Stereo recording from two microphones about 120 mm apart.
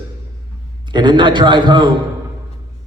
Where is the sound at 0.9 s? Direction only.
40° right (ahead or behind).